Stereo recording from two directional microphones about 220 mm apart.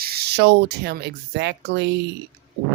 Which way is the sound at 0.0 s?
45° right (ahead or behind).